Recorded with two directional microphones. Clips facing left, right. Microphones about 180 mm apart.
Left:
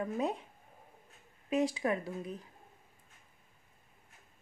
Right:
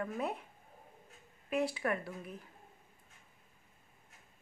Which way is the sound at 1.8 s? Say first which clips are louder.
Left 3 dB; 20° left (ahead or behind).